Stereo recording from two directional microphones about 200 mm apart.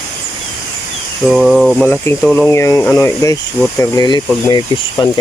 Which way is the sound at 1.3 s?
Centre (ahead or behind).